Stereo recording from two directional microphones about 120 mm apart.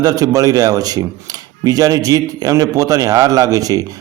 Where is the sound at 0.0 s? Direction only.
30° right (ahead or behind).